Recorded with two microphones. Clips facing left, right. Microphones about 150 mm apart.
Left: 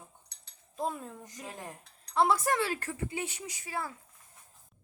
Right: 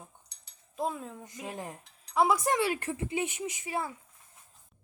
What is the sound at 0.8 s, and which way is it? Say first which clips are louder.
Speech: right 1 dB; centre (ahead or behind).